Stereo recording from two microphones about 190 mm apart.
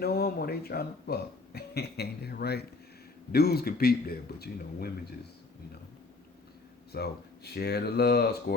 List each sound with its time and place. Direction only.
0.0 s speech: 55° left (ahead or behind)
6.9 s speech: 55° left (ahead or behind)